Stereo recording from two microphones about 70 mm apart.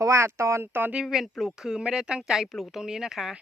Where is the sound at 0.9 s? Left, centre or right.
Centre.